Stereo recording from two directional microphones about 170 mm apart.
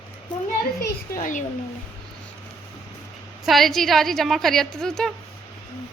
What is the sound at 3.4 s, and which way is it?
Speech, centre (ahead or behind).